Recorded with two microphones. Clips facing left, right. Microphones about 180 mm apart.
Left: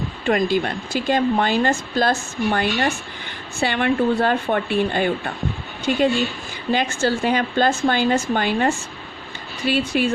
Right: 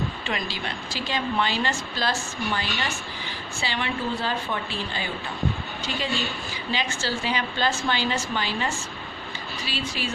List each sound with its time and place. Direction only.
0.3 s a woman's voice: 50° left (ahead or behind)